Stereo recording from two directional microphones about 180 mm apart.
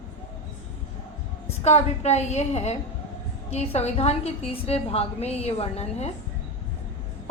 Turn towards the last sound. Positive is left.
turn(degrees=35)  # may be behind; listen again after turning